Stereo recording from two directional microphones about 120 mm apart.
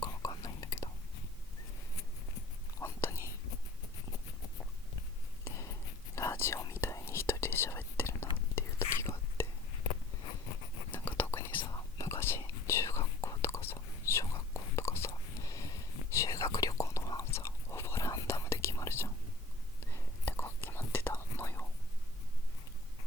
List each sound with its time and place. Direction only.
0.0 s whispering: 30° left (ahead or behind)
2.8 s whispering: 25° left (ahead or behind)
5.5 s a sound: 25° left (ahead or behind)
6.1 s whispering: 25° left (ahead or behind)
11.2 s whispering: 20° left (ahead or behind)
11.6 s whispering: 35° left (ahead or behind)
12.0 s whispering: 20° left (ahead or behind)